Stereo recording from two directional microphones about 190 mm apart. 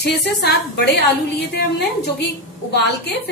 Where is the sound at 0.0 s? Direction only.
60° left (ahead or behind).